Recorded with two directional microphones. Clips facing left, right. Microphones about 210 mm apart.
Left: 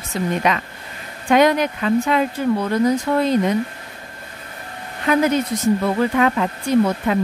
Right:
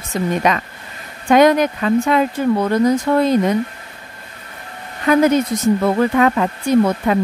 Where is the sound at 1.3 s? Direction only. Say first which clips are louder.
Right 3 dB; 45° right (ahead or behind).